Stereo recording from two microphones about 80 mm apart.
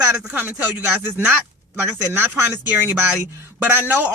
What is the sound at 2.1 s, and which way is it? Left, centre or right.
Speech, right.